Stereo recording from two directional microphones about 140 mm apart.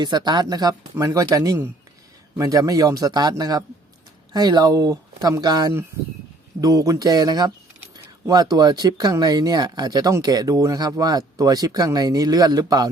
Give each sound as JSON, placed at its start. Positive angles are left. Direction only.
{"t": 0.0, "sound": "speech", "side_deg": -30}